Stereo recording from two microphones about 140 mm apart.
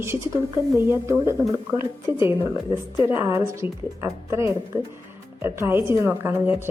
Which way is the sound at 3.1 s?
15° right (ahead or behind).